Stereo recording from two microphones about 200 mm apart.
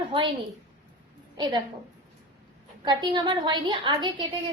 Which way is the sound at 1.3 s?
25° right (ahead or behind).